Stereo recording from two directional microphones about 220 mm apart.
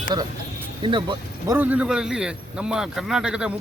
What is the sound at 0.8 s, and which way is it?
Speech, 20° right (ahead or behind).